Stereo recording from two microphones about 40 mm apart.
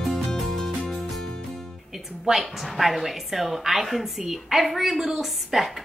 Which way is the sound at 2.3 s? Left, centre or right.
Centre.